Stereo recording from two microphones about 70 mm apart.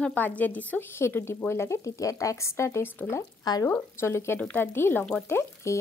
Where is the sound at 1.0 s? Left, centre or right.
Left.